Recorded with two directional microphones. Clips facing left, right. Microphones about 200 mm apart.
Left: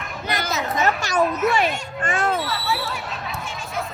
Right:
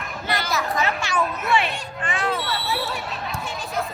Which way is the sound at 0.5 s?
20° left (ahead or behind).